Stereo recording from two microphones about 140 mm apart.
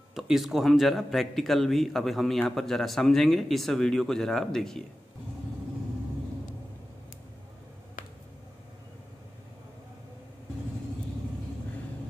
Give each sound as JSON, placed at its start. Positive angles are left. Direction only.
{"t": 0.1, "sound": "speech", "side_deg": 0}